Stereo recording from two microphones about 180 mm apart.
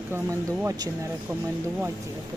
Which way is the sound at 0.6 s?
20° right (ahead or behind).